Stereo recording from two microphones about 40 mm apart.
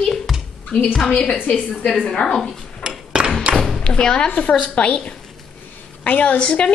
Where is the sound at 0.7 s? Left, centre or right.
Left.